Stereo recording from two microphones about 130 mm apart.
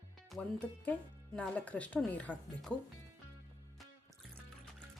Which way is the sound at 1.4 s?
10° left (ahead or behind).